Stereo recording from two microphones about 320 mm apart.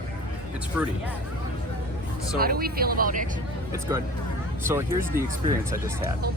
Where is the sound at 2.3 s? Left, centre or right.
Right.